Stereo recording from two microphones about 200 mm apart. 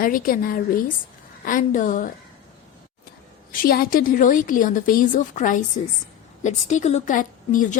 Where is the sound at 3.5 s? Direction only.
45° left (ahead or behind).